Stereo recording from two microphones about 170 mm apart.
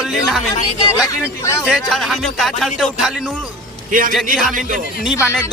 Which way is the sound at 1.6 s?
Centre (ahead or behind).